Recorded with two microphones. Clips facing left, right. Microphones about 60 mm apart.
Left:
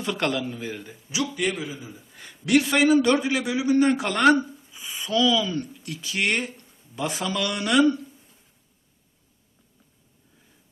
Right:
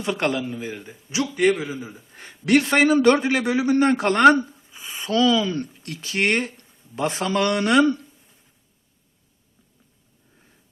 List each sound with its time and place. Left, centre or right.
0.0 s a man's voice: right
0.4 s a man's voice: centre
1.4 s a man's voice: right